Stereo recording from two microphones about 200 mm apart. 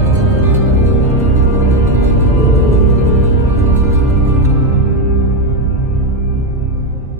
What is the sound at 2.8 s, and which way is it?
Music, centre (ahead or behind).